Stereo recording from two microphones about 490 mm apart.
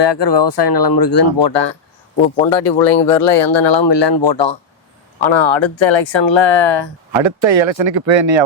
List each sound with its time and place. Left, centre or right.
0.0 s speech: left
2.2 s speech: centre
3.1 s speech: left
5.2 s speech: left
7.3 s speech: right